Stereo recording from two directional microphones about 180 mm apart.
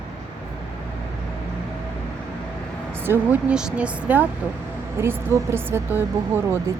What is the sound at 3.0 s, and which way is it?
Speech, 10° right (ahead or behind).